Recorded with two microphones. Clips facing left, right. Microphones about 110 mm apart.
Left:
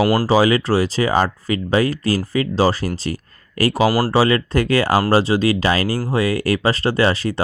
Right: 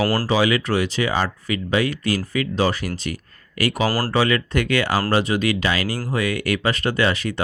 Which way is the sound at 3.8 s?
10° left (ahead or behind).